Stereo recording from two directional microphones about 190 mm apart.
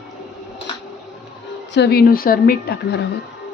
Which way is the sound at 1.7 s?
60° left (ahead or behind).